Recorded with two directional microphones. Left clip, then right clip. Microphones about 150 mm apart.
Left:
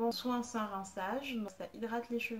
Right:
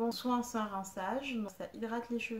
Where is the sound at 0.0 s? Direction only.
35° right (ahead or behind).